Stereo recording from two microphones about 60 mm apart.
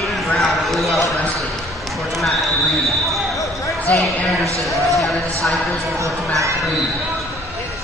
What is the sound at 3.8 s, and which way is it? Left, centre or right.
Basketball bounce, left.